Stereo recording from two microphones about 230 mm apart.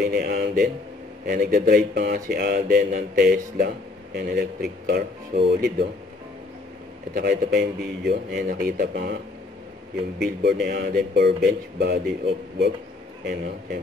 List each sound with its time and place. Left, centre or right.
0.0 s a man's voice: right
7.2 s speech: right
10.2 s speech: right